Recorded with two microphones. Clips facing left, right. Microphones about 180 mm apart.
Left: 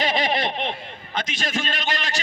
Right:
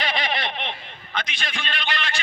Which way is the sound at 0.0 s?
45° left (ahead or behind).